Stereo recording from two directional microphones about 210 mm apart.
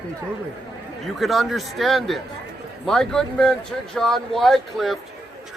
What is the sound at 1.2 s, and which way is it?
A man's voice, centre (ahead or behind).